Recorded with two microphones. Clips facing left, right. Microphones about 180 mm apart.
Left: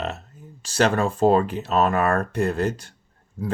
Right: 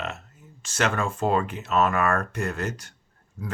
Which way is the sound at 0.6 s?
35° left (ahead or behind).